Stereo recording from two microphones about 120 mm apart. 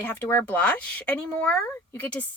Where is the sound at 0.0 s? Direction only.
15° left (ahead or behind).